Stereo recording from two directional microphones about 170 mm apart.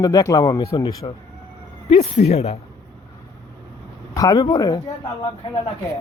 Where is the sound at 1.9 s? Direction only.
35° left (ahead or behind).